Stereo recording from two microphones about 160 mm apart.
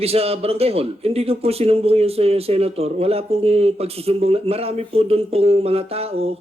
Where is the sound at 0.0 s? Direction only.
40° right (ahead or behind).